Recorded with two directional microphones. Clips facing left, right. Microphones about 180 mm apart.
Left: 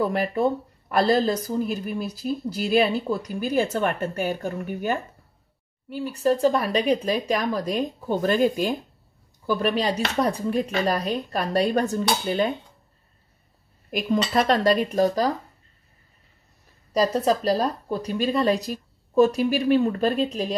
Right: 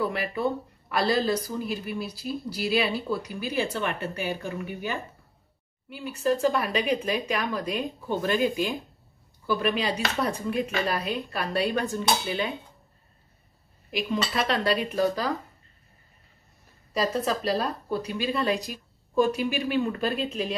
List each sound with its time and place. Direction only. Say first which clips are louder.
0.1 s speech: left 5 dB; 45° left (ahead or behind)
13.8 s speech: left 4 dB; 45° left (ahead or behind)
17.0 s speech: left 5 dB; 40° left (ahead or behind)